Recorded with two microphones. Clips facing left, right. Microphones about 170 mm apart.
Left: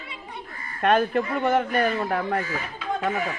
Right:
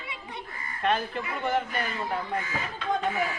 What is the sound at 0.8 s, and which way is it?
Speech, 60° left (ahead or behind).